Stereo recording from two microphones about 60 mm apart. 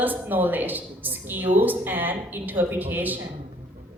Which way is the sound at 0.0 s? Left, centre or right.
Right.